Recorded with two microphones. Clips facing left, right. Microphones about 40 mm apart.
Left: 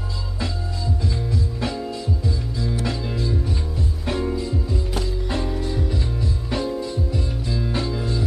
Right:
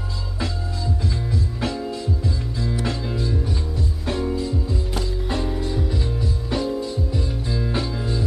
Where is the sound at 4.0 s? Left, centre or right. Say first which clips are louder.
Even; centre.